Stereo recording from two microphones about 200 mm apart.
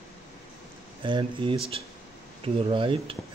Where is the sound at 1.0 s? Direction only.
25° right (ahead or behind).